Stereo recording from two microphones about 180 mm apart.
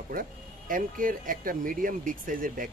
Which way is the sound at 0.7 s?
50° right (ahead or behind).